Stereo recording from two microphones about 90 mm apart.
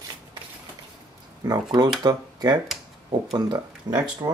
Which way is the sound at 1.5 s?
50° right (ahead or behind).